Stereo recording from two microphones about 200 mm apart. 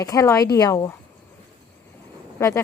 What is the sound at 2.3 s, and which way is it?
Speech, 15° left (ahead or behind).